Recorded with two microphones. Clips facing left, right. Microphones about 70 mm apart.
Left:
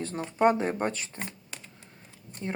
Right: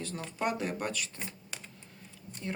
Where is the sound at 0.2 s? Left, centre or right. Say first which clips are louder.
Left 10 dB; left.